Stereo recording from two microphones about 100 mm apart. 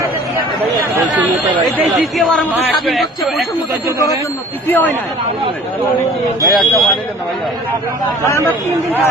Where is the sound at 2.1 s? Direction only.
5° left (ahead or behind).